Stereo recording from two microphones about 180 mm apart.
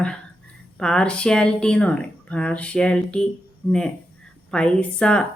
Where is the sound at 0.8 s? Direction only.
5° left (ahead or behind).